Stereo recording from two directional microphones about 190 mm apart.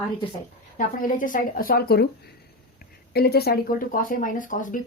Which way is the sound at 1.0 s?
45° left (ahead or behind).